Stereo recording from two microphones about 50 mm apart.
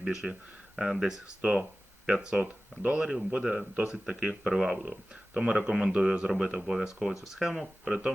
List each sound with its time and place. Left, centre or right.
0.0 s speech: centre
1.4 s speech: right; by 4.8 s centre
4.8 s speech: centre
7.9 s speech: centre